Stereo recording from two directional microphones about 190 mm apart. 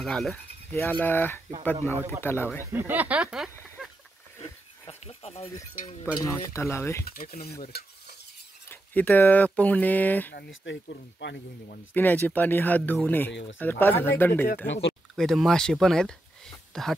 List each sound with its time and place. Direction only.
0.0 s speech: centre (ahead or behind)
2.6 s speech: 10° right (ahead or behind)
4.4 s a sound: 30° left (ahead or behind)
6.2 s speech: 15° left (ahead or behind)
7.1 s stir: 50° left (ahead or behind)
8.6 s speech: 10° left (ahead or behind)
10.3 s speech: 70° left (ahead or behind)
11.9 s speech: 10° left (ahead or behind)
13.3 s speech: 70° left (ahead or behind)
13.6 s speech: 10° left (ahead or behind)
14.7 s speech: 65° left (ahead or behind)
15.1 s speech: centre (ahead or behind)